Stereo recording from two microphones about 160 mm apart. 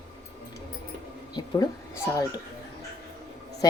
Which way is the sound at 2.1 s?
20° left (ahead or behind).